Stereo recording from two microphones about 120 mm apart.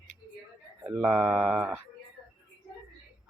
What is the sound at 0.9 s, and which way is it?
Mantra, 10° right (ahead or behind).